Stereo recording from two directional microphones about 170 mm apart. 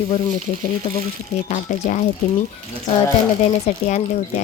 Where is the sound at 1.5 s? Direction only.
45° left (ahead or behind).